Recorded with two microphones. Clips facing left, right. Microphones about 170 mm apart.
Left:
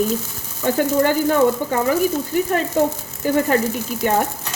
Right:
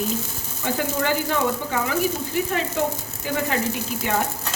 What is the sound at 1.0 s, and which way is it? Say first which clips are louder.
Speech: left 6 dB; 45° left (ahead or behind).